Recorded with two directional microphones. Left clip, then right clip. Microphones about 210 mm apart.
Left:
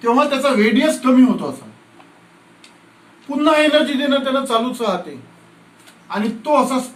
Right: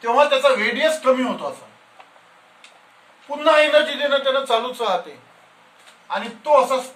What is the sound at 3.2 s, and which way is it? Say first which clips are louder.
A man's voice: left 1 dB; 15° right (ahead or behind).